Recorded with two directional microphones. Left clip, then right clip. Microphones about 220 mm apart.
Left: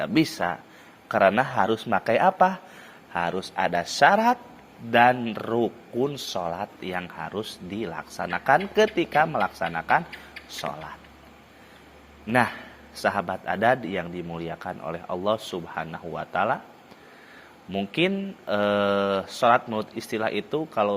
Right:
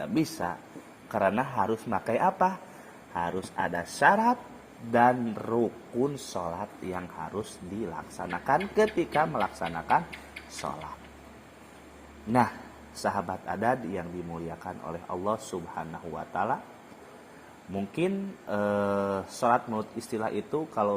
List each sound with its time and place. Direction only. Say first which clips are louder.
0.2 s speech: left 6 dB; 50° left (ahead or behind)
1.7 s speech: left 6 dB; 50° left (ahead or behind)
3.2 s a man's voice: left 5 dB; 35° left (ahead or behind)
4.1 s a man's voice: left 4 dB; 50° left (ahead or behind)
12.3 s a man's voice: left 3 dB; 40° left (ahead or behind)
17.7 s speech: left 6 dB; 35° left (ahead or behind)